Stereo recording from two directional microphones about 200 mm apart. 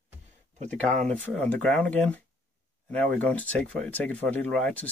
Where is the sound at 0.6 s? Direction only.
35° right (ahead or behind).